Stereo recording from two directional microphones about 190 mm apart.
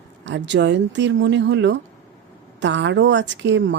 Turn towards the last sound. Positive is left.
turn(degrees=-70)  # may be behind; listen again after turning